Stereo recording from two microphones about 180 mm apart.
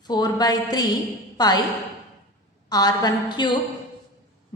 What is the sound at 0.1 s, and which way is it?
A woman's voice, 20° left (ahead or behind).